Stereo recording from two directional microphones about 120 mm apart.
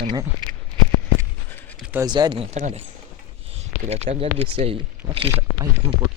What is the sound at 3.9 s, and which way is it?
Speech, 60° right (ahead or behind).